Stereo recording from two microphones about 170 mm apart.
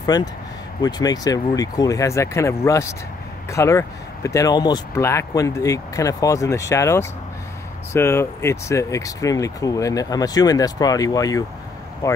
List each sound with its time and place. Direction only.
0.0 s speech: 25° left (ahead or behind)